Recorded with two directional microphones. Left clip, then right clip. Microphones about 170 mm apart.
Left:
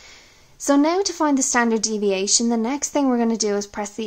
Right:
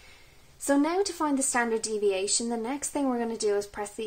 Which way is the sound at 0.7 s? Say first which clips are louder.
Left 7 dB; 40° left (ahead or behind).